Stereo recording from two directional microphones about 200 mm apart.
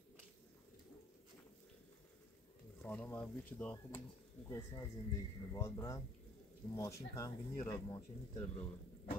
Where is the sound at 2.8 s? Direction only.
10° left (ahead or behind).